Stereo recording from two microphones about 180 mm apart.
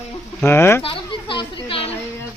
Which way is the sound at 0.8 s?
30° left (ahead or behind).